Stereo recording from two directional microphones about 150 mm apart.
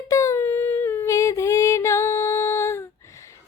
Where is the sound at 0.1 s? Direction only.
20° left (ahead or behind).